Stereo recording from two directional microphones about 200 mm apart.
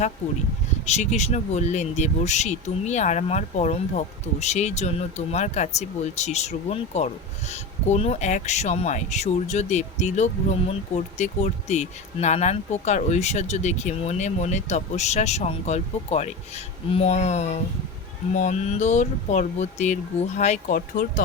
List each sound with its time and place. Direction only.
0.9 s speech: 35° left (ahead or behind)